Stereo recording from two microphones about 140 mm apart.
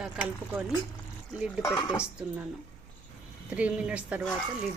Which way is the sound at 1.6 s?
20° left (ahead or behind).